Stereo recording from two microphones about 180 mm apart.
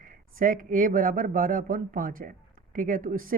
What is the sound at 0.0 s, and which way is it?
Speech, 50° right (ahead or behind).